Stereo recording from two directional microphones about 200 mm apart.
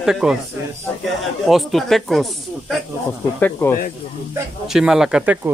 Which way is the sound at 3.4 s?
10° left (ahead or behind).